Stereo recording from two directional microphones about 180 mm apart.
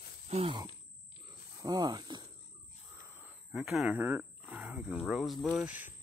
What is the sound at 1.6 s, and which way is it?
Speech, 20° right (ahead or behind).